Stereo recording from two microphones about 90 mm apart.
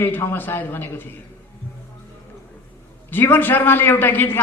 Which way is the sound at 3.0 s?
25° left (ahead or behind).